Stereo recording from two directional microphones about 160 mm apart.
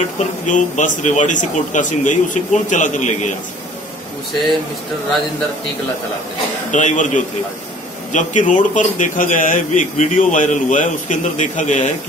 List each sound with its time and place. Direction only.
0.5 s a man's voice: 50° left (ahead or behind)
6.7 s a man's voice: 50° left (ahead or behind)